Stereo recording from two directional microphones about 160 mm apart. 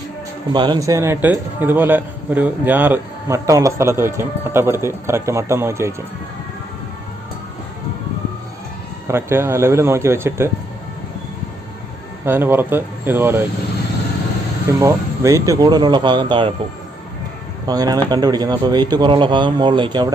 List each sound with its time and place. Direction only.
0.5 s a man's voice: 25° right (ahead or behind)
9.0 s a man's voice: 15° right (ahead or behind)
12.2 s a man's voice: 15° right (ahead or behind)
14.8 s speech: 20° right (ahead or behind)
17.7 s speech: 25° right (ahead or behind)